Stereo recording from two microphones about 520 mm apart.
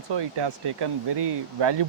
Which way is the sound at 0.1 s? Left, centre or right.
Right.